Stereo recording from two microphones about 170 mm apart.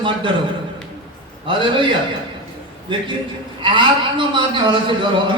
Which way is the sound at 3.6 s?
30° right (ahead or behind).